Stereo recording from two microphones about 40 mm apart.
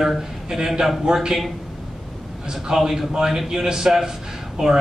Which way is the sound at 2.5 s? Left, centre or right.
Centre.